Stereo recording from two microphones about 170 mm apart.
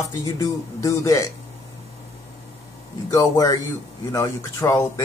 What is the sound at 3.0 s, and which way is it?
Speech, 20° left (ahead or behind).